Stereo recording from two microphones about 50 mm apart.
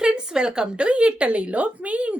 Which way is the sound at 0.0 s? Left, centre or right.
Centre.